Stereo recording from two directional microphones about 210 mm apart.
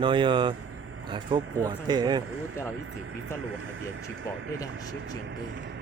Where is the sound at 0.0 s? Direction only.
25° right (ahead or behind).